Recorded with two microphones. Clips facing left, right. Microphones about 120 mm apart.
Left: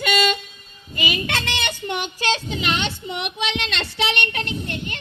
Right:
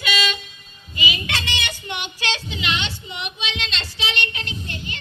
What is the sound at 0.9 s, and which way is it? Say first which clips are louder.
Child singing: left 2 dB; 50° left (ahead or behind).